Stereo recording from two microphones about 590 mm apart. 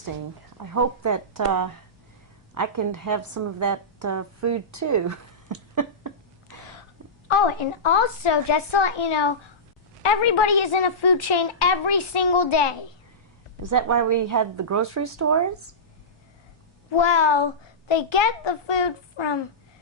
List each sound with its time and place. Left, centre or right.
0.6 s a woman's voice: right
7.3 s a woman's voice: left
13.6 s a woman's voice: right
17.0 s a woman's voice: left